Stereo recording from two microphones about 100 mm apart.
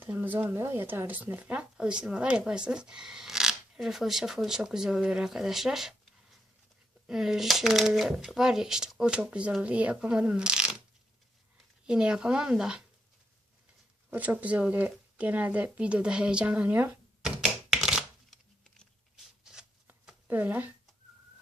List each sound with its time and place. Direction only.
0.0 s speech: 20° right (ahead or behind)
7.1 s speech: 5° right (ahead or behind)
11.9 s speech: 10° right (ahead or behind)
14.1 s speech: 15° right (ahead or behind)
17.2 s typewriter: 5° right (ahead or behind)
20.2 s speech: 20° right (ahead or behind)